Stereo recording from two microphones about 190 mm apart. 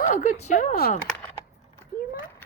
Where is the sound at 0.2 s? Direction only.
40° left (ahead or behind).